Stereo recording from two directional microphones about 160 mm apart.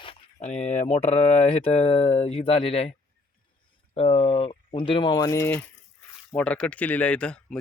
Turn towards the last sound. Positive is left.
turn(degrees=5)  # may be behind; listen again after turning